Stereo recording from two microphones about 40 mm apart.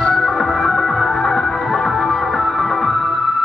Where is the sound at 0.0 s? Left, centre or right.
Centre.